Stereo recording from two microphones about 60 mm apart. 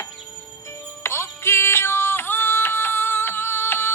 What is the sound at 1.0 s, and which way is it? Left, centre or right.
Music, left.